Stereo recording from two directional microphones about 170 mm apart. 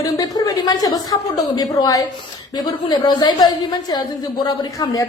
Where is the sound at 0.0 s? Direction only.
20° left (ahead or behind).